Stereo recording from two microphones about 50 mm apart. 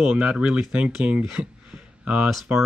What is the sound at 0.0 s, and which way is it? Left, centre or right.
Speech, centre.